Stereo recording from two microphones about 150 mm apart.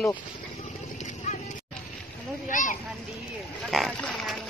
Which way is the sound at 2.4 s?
60° left (ahead or behind).